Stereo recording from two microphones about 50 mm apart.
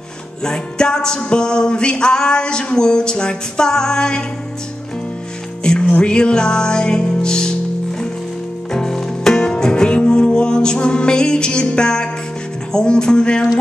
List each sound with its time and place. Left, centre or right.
0.4 s music: centre
5.6 s music: centre
8.7 s music: centre